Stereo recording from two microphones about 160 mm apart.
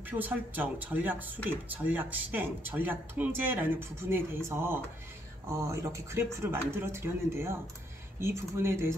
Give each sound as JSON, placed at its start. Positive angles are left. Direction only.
{"t": 0.1, "sound": "speech", "side_deg": -10}